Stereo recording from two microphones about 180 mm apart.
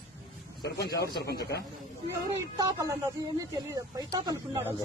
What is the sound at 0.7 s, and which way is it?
Speech, 60° left (ahead or behind).